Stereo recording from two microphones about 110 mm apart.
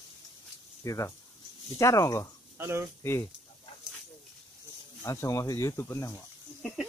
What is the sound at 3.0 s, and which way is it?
Speech, 25° left (ahead or behind).